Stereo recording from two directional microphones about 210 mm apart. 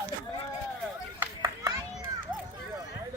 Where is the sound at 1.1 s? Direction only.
10° right (ahead or behind).